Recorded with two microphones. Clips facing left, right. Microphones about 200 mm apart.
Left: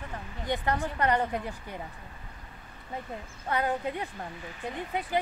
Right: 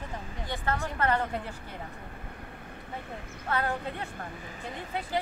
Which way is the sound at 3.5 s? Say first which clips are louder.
Left 2 dB; 15° left (ahead or behind).